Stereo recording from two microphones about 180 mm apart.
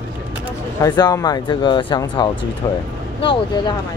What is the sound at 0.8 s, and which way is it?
Speech, 20° left (ahead or behind).